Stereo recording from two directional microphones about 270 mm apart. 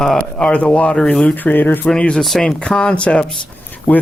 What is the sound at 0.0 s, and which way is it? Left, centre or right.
Speech, centre.